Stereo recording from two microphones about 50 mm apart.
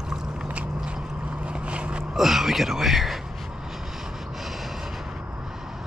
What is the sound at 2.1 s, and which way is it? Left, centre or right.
Speech, centre.